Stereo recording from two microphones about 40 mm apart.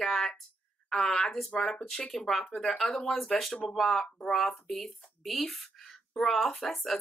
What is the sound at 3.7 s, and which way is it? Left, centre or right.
Speech, centre.